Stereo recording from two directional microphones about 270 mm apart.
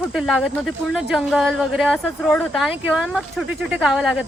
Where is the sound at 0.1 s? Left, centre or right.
Centre.